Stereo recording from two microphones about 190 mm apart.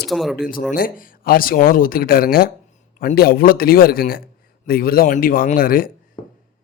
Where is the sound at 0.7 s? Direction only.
50° left (ahead or behind).